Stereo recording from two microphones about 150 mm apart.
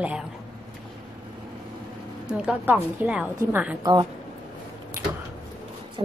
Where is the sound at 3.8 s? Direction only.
30° right (ahead or behind).